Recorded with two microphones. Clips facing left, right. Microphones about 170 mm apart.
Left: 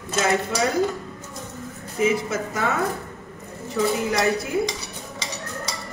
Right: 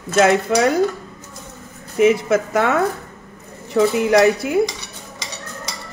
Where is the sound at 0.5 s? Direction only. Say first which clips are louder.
Right 7 dB; 70° right (ahead or behind).